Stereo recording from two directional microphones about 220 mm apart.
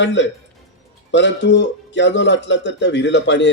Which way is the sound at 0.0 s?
55° left (ahead or behind).